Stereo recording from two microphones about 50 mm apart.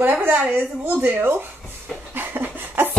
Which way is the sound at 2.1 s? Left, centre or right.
Right.